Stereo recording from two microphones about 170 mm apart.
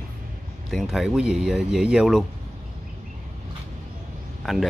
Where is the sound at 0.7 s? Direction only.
Centre (ahead or behind).